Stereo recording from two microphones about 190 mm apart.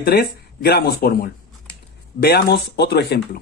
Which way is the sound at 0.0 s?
55° left (ahead or behind).